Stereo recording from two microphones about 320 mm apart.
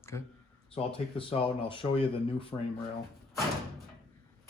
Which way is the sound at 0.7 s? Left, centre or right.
Centre.